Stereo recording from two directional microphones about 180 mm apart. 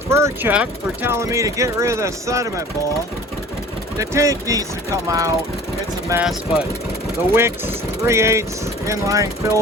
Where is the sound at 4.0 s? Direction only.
20° right (ahead or behind).